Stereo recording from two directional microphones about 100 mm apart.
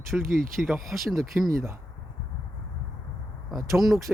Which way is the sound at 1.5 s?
30° right (ahead or behind).